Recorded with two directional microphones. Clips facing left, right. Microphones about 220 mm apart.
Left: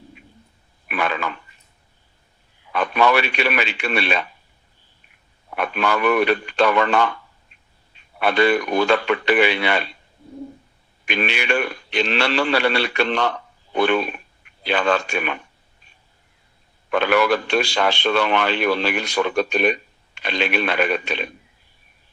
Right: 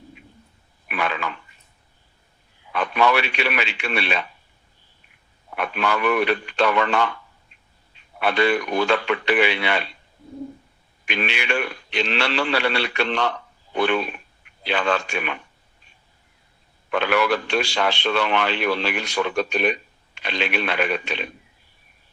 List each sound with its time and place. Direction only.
0.9 s telephone: 45° left (ahead or behind)
2.7 s speech: 45° left (ahead or behind)
5.5 s speech: 45° left (ahead or behind)
8.2 s speech: 45° left (ahead or behind)
11.0 s speech: 45° left (ahead or behind)
16.9 s speech: 45° left (ahead or behind)